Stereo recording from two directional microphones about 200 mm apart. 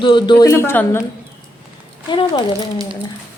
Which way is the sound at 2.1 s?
25° left (ahead or behind).